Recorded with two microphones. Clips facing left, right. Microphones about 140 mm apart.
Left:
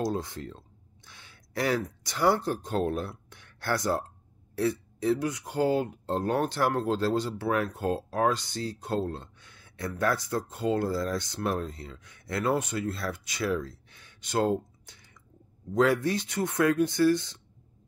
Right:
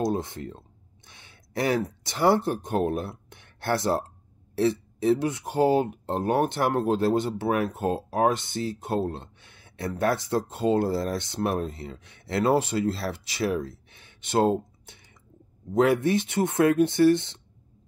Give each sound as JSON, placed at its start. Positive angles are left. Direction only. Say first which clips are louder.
{"t": 0.0, "sound": "speech", "louder": "right 3 dB", "side_deg": -20}
{"t": 8.8, "sound": "a sound", "louder": "right 1 dB", "side_deg": -25}
{"t": 9.9, "sound": "speech", "louder": "right 3 dB", "side_deg": -25}
{"t": 15.7, "sound": "speech", "louder": "right 3 dB", "side_deg": -20}